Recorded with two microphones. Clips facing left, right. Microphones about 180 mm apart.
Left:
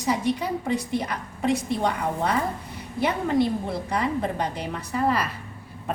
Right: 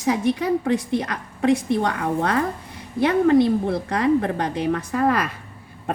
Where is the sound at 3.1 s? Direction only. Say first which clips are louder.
Right 8 dB; 65° right (ahead or behind).